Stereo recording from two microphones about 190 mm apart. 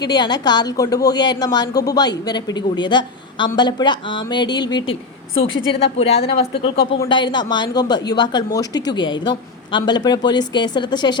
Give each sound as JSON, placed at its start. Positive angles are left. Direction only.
{"t": 0.0, "sound": "a woman's voice", "side_deg": 20}
{"t": 6.0, "sound": "a woman's voice", "side_deg": 30}